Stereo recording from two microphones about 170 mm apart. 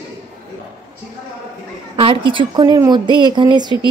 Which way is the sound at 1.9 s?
30° right (ahead or behind).